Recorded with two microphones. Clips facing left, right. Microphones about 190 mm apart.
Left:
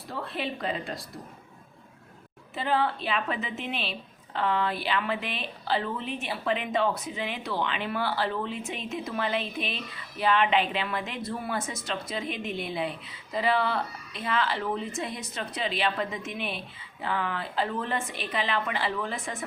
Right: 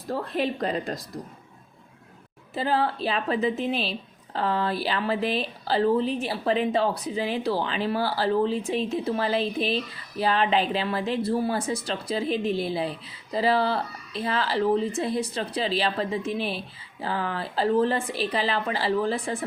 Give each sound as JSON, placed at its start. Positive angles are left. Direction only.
{"t": 0.1, "sound": "a woman's voice", "side_deg": -40}
{"t": 2.6, "sound": "a woman's voice", "side_deg": -35}